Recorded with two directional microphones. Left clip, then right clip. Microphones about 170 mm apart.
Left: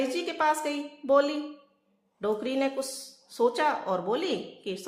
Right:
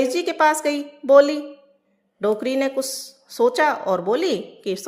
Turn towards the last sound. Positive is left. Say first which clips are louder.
# right 8 dB
turn(degrees=-30)  # may be behind; listen again after turning